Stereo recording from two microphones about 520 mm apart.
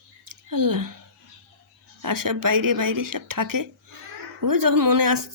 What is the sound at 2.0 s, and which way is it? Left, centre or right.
Speech, right.